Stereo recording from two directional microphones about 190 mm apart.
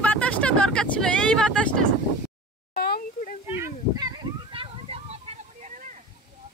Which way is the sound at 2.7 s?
55° left (ahead or behind).